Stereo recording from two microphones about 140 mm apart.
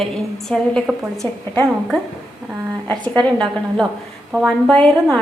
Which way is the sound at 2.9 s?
30° right (ahead or behind).